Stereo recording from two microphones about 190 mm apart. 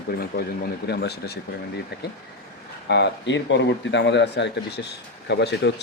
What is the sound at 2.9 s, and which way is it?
Speech, 70° left (ahead or behind).